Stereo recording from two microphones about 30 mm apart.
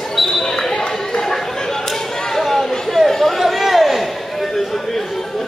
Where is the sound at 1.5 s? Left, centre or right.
Centre.